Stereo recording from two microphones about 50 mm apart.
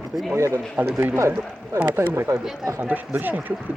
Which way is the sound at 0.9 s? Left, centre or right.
Right.